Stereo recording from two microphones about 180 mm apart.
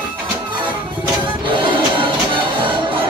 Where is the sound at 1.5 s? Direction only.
25° right (ahead or behind).